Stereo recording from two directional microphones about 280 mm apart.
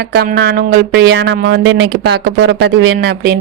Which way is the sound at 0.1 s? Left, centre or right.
Right.